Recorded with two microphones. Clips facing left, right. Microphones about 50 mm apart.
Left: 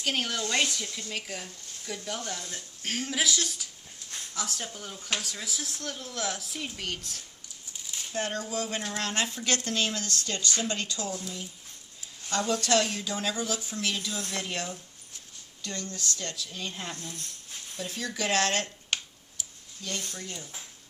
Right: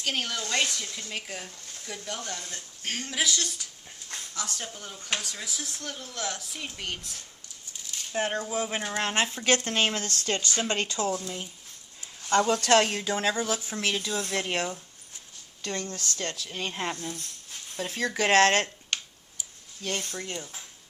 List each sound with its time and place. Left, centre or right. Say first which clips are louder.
0.0 s speech: left 1 dB; centre
8.1 s speech: right 3 dB; centre
9.0 s speech: right 5 dB; right
18.9 s finger snapping: left 1 dB; centre
19.8 s speech: right 4 dB; right